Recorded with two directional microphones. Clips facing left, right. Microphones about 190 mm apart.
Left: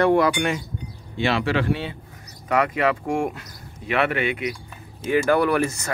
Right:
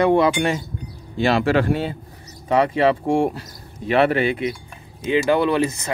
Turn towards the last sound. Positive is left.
turn(degrees=-20)  # may be behind; listen again after turning